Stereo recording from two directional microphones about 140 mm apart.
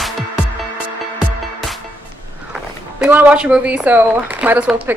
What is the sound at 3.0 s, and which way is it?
Speech, 10° right (ahead or behind).